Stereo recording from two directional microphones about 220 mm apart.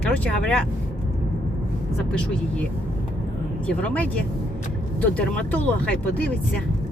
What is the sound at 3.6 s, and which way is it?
Speech, 5° left (ahead or behind).